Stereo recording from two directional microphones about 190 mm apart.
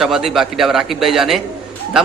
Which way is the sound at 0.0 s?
Centre (ahead or behind).